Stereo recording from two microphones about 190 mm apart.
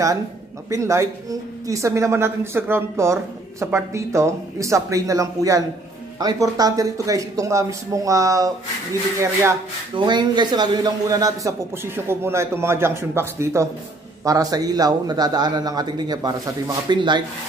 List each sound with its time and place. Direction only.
0.7 s a woman's voice: 15° right (ahead or behind)